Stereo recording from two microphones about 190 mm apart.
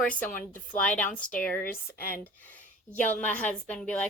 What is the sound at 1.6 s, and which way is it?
Speech, 50° left (ahead or behind).